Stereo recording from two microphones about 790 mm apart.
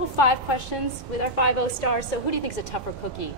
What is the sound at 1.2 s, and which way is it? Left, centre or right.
A woman's voice, left.